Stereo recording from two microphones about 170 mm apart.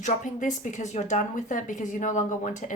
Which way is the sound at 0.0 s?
45° left (ahead or behind).